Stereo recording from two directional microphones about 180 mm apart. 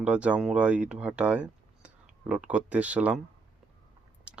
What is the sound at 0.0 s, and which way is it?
Speech, 5° right (ahead or behind).